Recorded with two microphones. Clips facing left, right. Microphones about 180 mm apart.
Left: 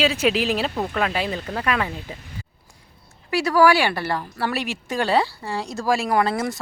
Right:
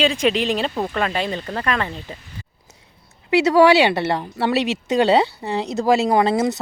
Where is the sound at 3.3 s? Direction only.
20° right (ahead or behind).